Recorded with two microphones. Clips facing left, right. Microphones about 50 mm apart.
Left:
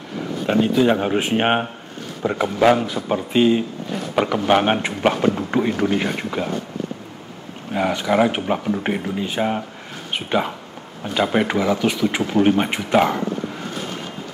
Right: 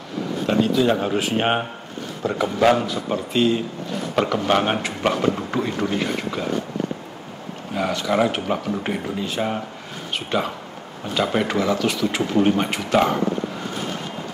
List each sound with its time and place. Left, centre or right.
0.5 s speech: left
7.7 s speech: centre